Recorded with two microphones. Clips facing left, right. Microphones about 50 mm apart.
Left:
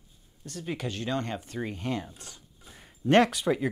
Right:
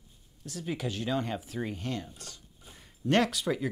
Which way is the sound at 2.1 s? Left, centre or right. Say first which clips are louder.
Even; left.